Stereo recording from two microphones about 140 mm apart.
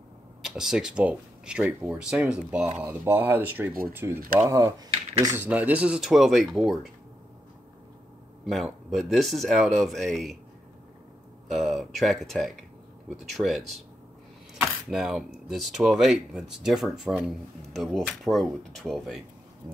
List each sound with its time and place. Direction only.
0.4 s speech: 5° right (ahead or behind); by 4.8 s 25° right (ahead or behind)
5.4 s speech: 10° right (ahead or behind)
8.5 s speech: centre (ahead or behind)
11.5 s speech: centre (ahead or behind)
14.5 s a sound: 5° right (ahead or behind)
15.7 s speech: centre (ahead or behind)